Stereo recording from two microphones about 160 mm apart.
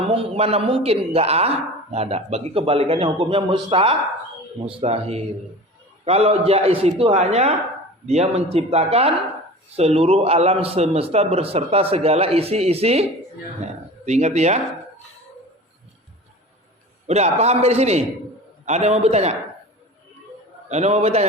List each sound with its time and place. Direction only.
0.1 s a man's voice: 35° right (ahead or behind)
17.1 s a man's voice: 45° right (ahead or behind)
20.7 s a man's voice: 45° right (ahead or behind)